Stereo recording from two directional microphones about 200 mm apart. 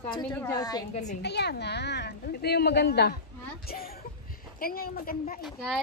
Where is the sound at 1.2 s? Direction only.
55° left (ahead or behind).